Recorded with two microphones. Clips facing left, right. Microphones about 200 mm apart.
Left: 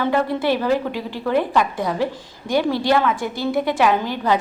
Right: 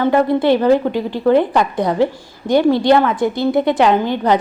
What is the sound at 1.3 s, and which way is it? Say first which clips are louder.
Speech: right 5 dB; 60° right (ahead or behind).